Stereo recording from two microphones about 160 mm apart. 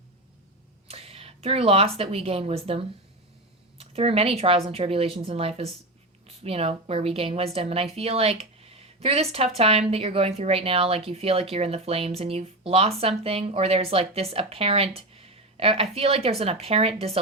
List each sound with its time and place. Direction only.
0.9 s speech: 40° right (ahead or behind)